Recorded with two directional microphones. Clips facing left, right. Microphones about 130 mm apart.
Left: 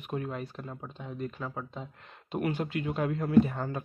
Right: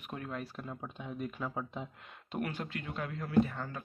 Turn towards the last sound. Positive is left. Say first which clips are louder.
# left 6 dB
turn(degrees=25)  # may be behind; listen again after turning